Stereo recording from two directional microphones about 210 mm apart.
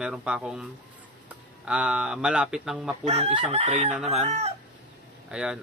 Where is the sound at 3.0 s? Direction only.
30° right (ahead or behind).